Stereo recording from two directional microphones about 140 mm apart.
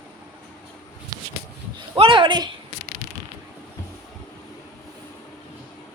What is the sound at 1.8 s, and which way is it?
Speech, 35° right (ahead or behind).